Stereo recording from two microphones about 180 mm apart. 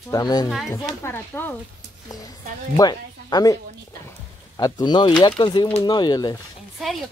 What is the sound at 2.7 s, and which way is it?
Speech, 20° left (ahead or behind).